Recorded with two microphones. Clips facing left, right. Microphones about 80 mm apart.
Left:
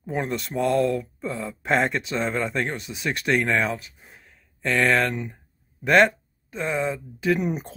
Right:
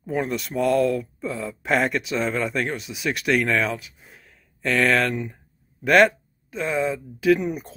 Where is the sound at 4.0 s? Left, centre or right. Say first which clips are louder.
Even; centre.